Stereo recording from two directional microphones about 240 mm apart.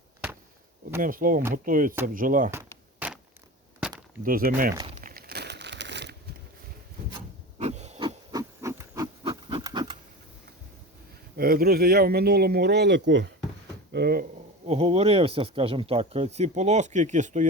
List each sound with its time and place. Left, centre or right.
1.0 s speech: right
3.0 s a sound: centre
4.2 s speech: right
4.7 s speech: centre
4.9 s crumpling: right
7.6 s a sound: right
9.2 s pant: centre
11.3 s speech: right
14.7 s speech: right